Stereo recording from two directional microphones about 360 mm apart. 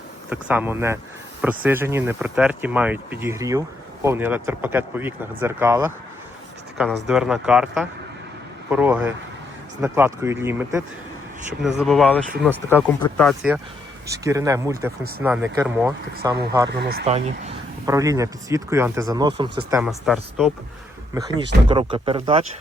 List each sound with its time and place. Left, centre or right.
0.3 s speech: centre
16.7 s speech: right
17.1 s speech: centre
21.2 s speech: centre